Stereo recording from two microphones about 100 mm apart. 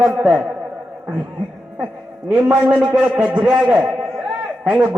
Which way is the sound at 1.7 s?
15° right (ahead or behind).